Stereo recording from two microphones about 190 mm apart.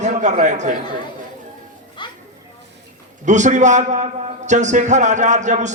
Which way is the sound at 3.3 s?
40° right (ahead or behind).